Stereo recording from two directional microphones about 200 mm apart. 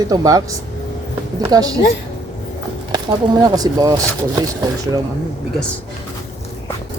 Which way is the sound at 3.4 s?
20° right (ahead or behind).